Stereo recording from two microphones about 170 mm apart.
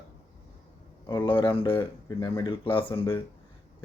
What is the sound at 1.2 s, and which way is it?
Speech, 30° left (ahead or behind).